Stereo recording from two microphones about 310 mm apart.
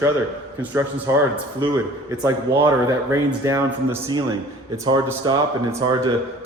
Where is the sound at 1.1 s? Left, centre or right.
Centre.